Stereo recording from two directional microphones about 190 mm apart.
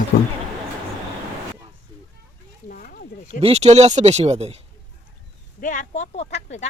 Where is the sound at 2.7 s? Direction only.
45° left (ahead or behind).